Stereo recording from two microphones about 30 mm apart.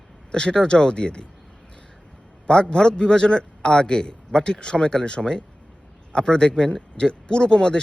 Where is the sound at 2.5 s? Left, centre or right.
Left.